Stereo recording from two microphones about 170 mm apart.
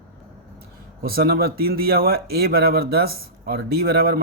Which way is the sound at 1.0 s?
65° right (ahead or behind).